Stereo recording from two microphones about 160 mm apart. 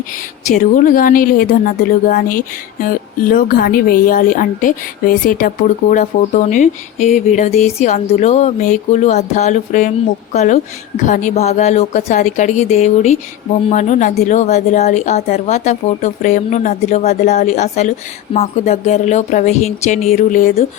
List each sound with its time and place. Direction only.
0.4 s a woman's voice: 55° left (ahead or behind)